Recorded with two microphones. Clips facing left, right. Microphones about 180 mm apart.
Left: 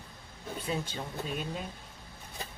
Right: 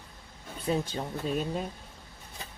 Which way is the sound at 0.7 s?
40° right (ahead or behind).